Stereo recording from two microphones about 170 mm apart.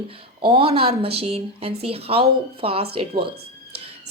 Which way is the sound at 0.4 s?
30° right (ahead or behind).